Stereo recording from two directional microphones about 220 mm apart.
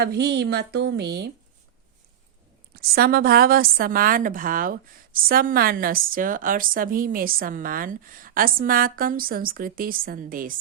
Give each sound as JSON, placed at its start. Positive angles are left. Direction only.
{"t": 0.0, "sound": "speech", "side_deg": -50}
{"t": 2.7, "sound": "a woman's voice", "side_deg": -45}